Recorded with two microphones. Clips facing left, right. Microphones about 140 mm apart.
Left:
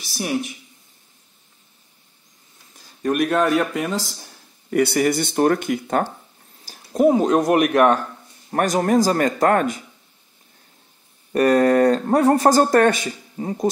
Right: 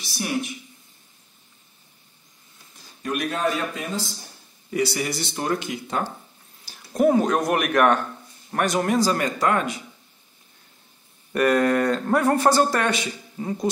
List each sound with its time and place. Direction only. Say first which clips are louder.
3.0 s speech: left 6 dB; 55° left (ahead or behind)
4.6 s speech: left 7 dB; 55° left (ahead or behind)
6.7 s a sound: left 3 dB; 45° left (ahead or behind)
7.0 s a man's voice: left 3 dB; 25° left (ahead or behind); by 9.8 s 50° left (ahead or behind)
11.3 s speech: left 4 dB; 35° left (ahead or behind)